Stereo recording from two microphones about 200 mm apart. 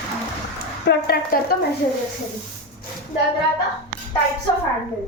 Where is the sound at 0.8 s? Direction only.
50° left (ahead or behind).